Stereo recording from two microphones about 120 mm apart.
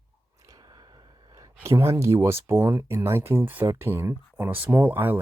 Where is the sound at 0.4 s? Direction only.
30° right (ahead or behind).